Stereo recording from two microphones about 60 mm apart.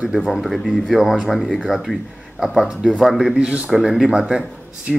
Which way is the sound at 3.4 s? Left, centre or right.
Centre.